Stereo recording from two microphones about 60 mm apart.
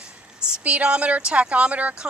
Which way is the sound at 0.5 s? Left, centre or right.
Centre.